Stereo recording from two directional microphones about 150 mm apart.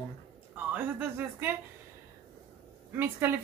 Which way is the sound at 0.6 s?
10° right (ahead or behind).